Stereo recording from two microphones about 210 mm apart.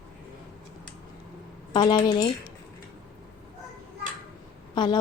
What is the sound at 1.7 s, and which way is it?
Speech, 20° left (ahead or behind).